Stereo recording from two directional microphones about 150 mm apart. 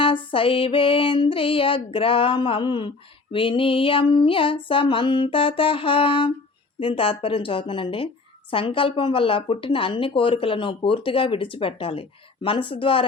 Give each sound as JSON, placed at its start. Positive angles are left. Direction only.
{"t": 0.0, "sound": "a woman's voice", "side_deg": 35}